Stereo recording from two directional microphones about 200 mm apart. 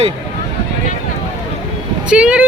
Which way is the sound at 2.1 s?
5° right (ahead or behind).